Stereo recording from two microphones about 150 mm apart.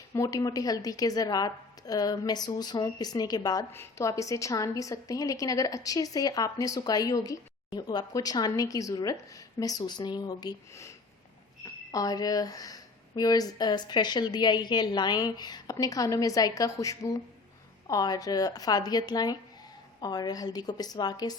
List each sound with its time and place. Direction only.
0.1 s a woman's voice: 20° left (ahead or behind)